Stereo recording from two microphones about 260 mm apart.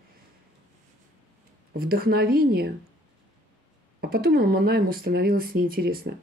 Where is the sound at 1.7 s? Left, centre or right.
Right.